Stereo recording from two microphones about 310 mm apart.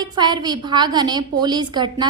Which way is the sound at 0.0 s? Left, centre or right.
Centre.